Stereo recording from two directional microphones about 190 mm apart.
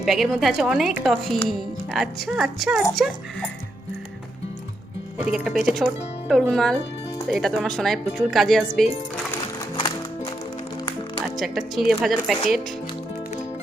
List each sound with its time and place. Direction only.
0.0 s speech: centre (ahead or behind)
5.1 s speech: 5° right (ahead or behind)
9.7 s music: 25° left (ahead or behind)
11.3 s speech: centre (ahead or behind)